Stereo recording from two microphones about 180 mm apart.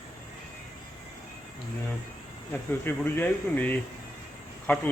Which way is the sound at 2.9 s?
10° left (ahead or behind).